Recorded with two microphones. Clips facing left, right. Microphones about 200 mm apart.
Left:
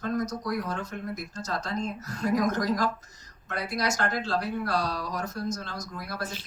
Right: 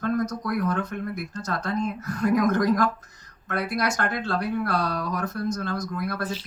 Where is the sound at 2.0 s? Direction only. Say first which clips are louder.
Right 4 dB; 55° right (ahead or behind).